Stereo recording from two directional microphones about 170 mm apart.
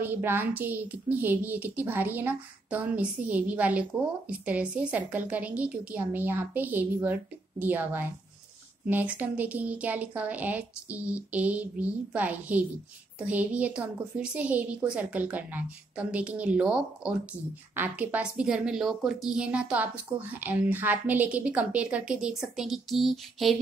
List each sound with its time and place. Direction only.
0.0 s a woman's voice: 10° right (ahead or behind)